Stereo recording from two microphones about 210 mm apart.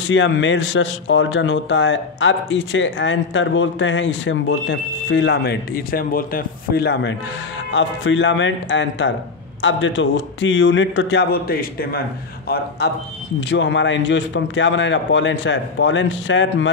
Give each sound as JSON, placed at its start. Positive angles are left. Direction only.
{"t": 0.1, "sound": "a man's voice", "side_deg": 65}